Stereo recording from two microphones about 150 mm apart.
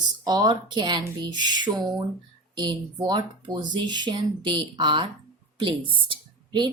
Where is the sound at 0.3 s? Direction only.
30° right (ahead or behind).